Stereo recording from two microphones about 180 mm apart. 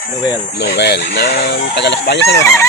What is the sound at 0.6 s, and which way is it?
Speech, 70° left (ahead or behind).